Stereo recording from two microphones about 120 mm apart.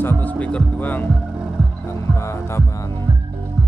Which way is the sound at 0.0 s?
15° left (ahead or behind).